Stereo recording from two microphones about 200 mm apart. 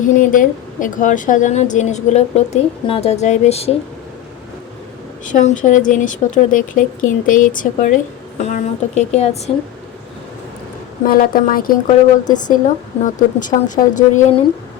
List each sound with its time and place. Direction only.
0.0 s a woman's voice: 40° left (ahead or behind)
5.2 s a woman's voice: 40° left (ahead or behind)
11.0 s a woman's voice: 45° left (ahead or behind)